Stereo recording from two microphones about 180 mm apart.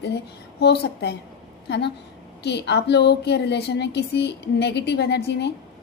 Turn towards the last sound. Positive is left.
turn(degrees=70)  # may be behind; listen again after turning